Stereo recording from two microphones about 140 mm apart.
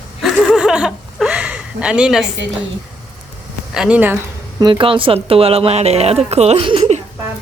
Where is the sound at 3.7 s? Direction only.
5° right (ahead or behind).